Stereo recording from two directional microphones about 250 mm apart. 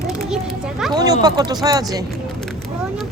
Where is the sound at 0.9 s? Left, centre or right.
Centre.